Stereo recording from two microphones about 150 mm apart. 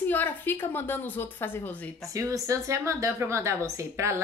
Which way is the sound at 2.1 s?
20° right (ahead or behind).